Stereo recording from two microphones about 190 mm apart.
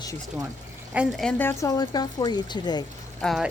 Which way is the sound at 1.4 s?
15° left (ahead or behind).